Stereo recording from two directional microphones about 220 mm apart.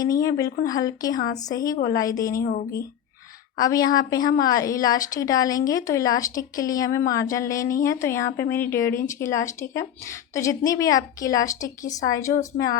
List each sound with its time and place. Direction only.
0.0 s a woman's voice: 15° left (ahead or behind)
2.4 s speech: 40° left (ahead or behind)
3.6 s a woman's voice: 15° left (ahead or behind)